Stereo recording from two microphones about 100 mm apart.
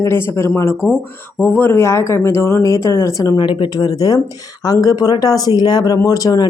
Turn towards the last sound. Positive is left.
turn(degrees=40)  # may be behind; listen again after turning